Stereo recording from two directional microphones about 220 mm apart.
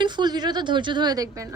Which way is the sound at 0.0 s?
20° right (ahead or behind).